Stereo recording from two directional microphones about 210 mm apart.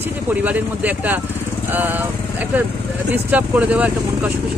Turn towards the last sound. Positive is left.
turn(degrees=-5)  # may be behind; listen again after turning